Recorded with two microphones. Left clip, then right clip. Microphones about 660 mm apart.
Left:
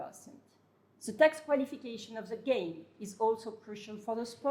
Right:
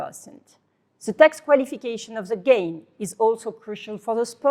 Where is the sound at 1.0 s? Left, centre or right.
Right.